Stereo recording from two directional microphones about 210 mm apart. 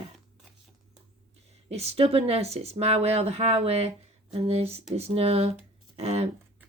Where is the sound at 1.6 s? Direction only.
30° right (ahead or behind).